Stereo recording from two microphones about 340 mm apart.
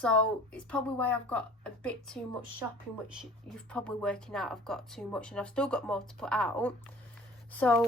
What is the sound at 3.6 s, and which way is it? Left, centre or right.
A woman's voice, centre.